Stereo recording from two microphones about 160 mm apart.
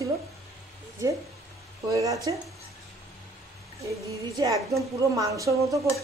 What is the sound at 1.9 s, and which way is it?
Speech, 20° right (ahead or behind).